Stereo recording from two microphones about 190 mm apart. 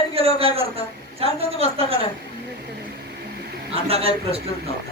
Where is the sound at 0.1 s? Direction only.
30° right (ahead or behind).